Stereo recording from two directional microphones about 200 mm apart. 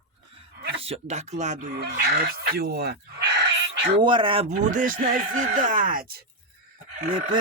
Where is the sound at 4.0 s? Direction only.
25° right (ahead or behind); by 6.3 s 50° right (ahead or behind).